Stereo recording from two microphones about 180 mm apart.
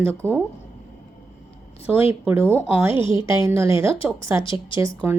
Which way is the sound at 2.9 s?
30° left (ahead or behind).